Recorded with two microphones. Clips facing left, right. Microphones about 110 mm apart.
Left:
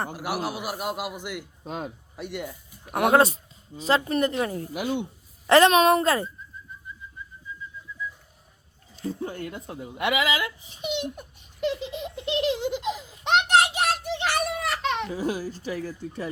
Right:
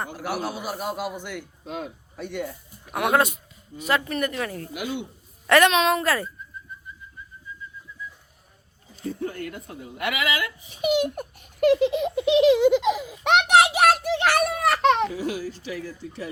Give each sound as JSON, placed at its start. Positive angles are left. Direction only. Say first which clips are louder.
{"t": 0.1, "sound": "a man's voice", "louder": "even", "side_deg": 10}
{"t": 1.6, "sound": "speech", "louder": "even", "side_deg": 40}
{"t": 2.3, "sound": "a man's voice", "louder": "right 3 dB", "side_deg": 10}
{"t": 2.9, "sound": "speech", "louder": "left 2 dB", "side_deg": 40}
{"t": 4.7, "sound": "speech", "louder": "left 3 dB", "side_deg": 40}
{"t": 5.5, "sound": "speech", "louder": "left 2 dB", "side_deg": 30}
{"t": 6.1, "sound": "speech", "louder": "left 1 dB", "side_deg": 25}
{"t": 9.0, "sound": "speech", "louder": "right 1 dB", "side_deg": 25}
{"t": 10.8, "sound": "speech", "louder": "right 8 dB", "side_deg": -70}
{"t": 12.4, "sound": "baby laughter", "louder": "right 10 dB", "side_deg": -80}
{"t": 15.1, "sound": "speech", "louder": "even", "side_deg": 40}